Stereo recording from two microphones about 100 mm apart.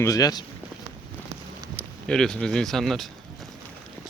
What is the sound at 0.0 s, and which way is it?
Speech, 35° left (ahead or behind).